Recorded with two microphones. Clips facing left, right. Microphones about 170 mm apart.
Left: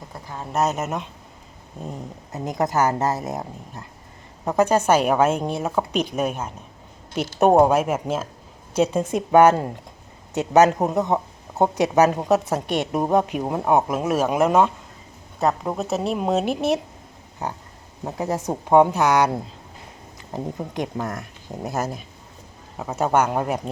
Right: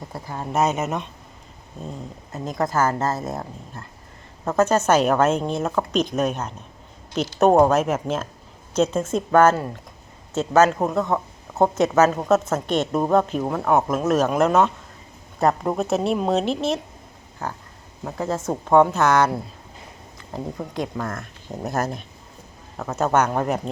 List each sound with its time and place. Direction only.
0.1 s a woman's voice: 5° right (ahead or behind)
1.9 s speech: 20° left (ahead or behind)
15.4 s a woman's voice: centre (ahead or behind)